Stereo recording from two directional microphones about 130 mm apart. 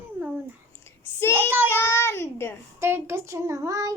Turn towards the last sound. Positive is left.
turn(degrees=-25)  # may be behind; listen again after turning